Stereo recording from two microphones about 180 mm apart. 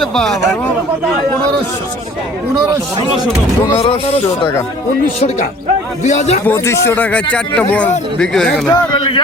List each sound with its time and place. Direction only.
0.0 s speech: centre (ahead or behind)
3.7 s speech: 35° left (ahead or behind)
6.0 s speech: 40° left (ahead or behind)
6.4 s speech: 10° left (ahead or behind)
8.7 s speech: 25° left (ahead or behind)